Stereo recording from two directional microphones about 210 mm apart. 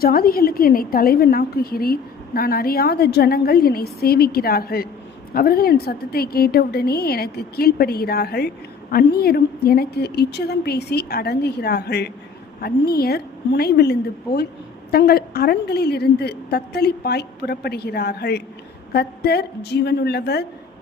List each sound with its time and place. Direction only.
0.0 s a woman's voice: 45° left (ahead or behind)